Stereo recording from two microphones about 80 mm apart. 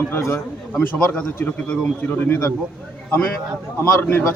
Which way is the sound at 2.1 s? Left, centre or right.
Left.